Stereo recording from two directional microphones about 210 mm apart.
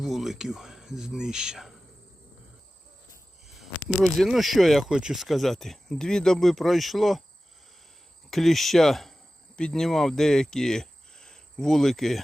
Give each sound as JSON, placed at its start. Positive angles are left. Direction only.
{"t": 0.0, "sound": "speech", "side_deg": 0}
{"t": 3.8, "sound": "speech", "side_deg": 0}
{"t": 8.3, "sound": "speech", "side_deg": 0}